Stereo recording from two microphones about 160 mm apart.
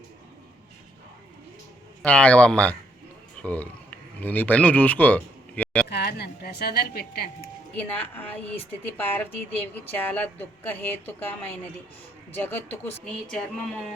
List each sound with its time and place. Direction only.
2.0 s speech: 10° left (ahead or behind)
5.9 s a woman's voice: 80° left
7.8 s speech: 10° left (ahead or behind)